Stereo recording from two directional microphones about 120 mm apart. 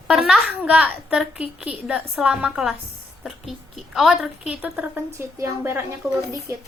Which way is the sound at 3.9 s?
5° right (ahead or behind).